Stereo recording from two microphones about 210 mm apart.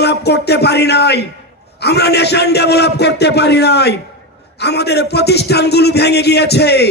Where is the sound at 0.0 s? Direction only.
50° left (ahead or behind).